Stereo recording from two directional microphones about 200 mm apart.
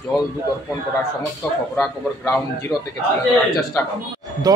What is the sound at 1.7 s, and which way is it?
A man's voice, 10° left (ahead or behind).